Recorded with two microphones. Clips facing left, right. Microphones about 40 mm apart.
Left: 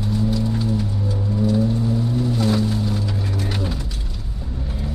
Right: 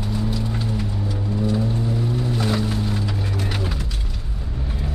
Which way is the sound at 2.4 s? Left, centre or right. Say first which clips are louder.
Left 3 dB; right.